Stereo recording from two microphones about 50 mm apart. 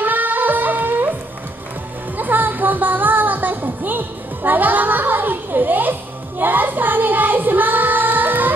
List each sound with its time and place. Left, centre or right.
0.0 s music: right
2.1 s music: right